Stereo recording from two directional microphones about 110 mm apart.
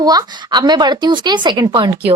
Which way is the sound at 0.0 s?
35° right (ahead or behind).